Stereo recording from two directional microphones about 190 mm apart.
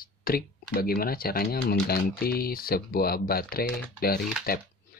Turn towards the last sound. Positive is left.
turn(degrees=50)  # may be behind; listen again after turning